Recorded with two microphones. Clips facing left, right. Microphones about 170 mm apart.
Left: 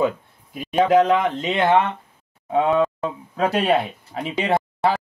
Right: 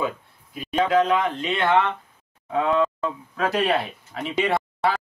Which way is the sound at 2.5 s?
25° left (ahead or behind).